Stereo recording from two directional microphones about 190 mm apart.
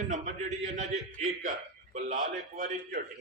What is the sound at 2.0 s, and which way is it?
Speech, 45° right (ahead or behind).